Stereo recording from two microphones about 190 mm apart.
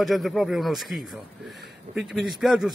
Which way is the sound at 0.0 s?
Centre (ahead or behind).